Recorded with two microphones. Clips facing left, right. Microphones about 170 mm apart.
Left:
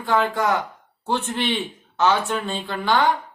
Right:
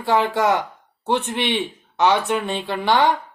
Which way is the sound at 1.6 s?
15° right (ahead or behind).